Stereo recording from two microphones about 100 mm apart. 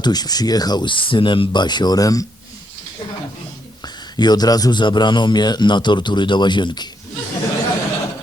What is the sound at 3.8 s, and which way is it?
A man's voice, 45° left (ahead or behind).